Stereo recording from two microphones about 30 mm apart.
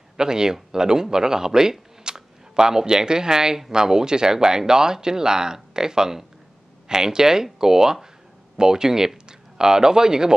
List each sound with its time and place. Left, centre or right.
0.2 s speech: right